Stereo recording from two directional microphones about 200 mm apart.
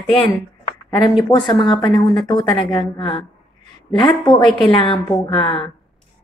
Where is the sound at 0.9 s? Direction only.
20° left (ahead or behind).